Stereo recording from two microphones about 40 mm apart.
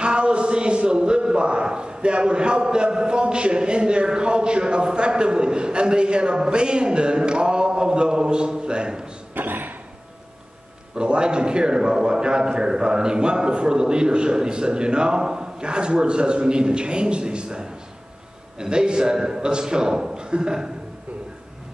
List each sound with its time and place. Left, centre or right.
0.0 s a man's voice: right
9.3 s a sound: right
11.0 s a man's voice: right